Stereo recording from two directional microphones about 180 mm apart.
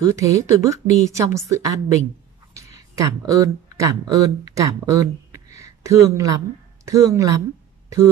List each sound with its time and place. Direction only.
0.0 s a woman's voice: 20° right (ahead or behind)